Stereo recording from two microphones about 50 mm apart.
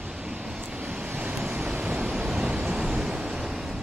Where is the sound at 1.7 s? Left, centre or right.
Right.